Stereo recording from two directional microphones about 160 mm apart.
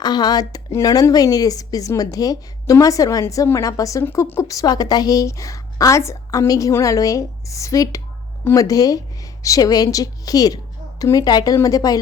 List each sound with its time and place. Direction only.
0.0 s a woman's voice: 25° left (ahead or behind)